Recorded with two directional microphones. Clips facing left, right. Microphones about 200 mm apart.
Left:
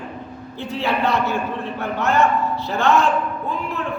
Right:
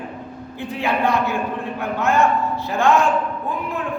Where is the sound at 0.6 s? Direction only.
15° right (ahead or behind).